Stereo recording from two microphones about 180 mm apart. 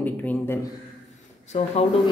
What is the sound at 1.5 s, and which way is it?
Speech, 40° left (ahead or behind).